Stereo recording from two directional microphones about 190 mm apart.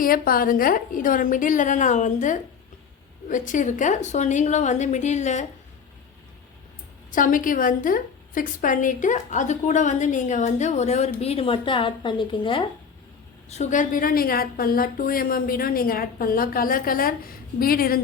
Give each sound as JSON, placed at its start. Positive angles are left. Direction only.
{"t": 0.0, "sound": "a woman's voice", "side_deg": 50}
{"t": 7.1, "sound": "a woman's voice", "side_deg": 45}
{"t": 13.5, "sound": "a woman's voice", "side_deg": 40}